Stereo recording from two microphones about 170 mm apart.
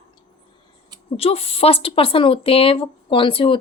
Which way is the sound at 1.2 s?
35° left (ahead or behind).